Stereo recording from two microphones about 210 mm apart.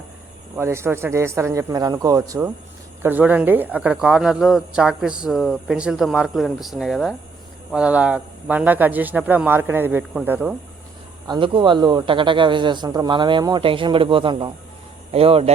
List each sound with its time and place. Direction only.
0.5 s speech: 10° right (ahead or behind)
11.3 s a man's voice: 25° right (ahead or behind)